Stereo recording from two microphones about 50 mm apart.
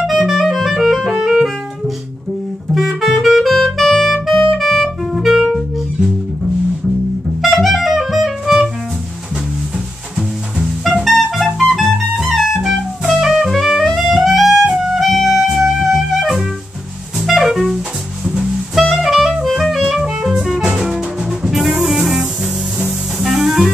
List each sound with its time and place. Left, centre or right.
0.0 s music: centre
2.7 s music: centre
4.8 s music: centre
7.4 s music: centre
10.8 s music: centre
12.6 s music: centre
13.5 s music: centre
17.2 s clarinet: centre
17.6 s music: centre
22.0 s music: centre
23.1 s clarinet: centre